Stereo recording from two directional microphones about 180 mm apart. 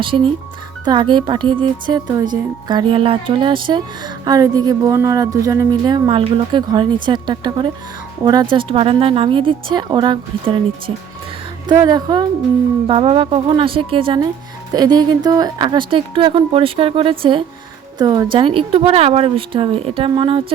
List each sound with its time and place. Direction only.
0.0 s speech: 30° right (ahead or behind)
11.7 s speech: 20° right (ahead or behind)